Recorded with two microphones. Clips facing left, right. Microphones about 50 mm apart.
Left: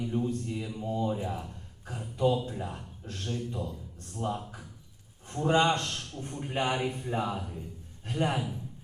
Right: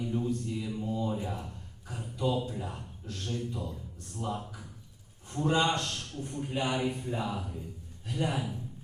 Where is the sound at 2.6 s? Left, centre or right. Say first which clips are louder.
Left 2 dB; left.